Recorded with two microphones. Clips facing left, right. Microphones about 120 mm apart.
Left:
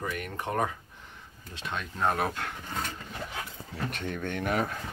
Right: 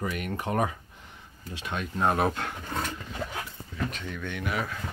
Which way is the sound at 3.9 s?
55° left (ahead or behind).